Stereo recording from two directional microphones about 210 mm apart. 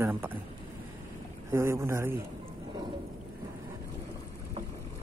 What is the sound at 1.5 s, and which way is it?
Speech, 10° right (ahead or behind).